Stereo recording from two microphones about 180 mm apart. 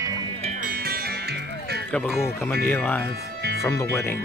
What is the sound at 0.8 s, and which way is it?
Music, 60° right (ahead or behind).